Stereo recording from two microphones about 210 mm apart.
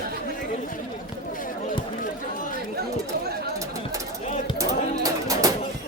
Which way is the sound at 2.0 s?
40° left (ahead or behind).